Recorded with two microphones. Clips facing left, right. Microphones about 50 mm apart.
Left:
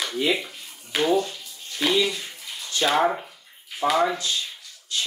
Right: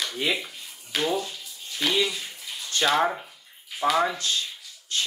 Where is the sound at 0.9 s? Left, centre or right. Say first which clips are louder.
Left 5 dB; centre.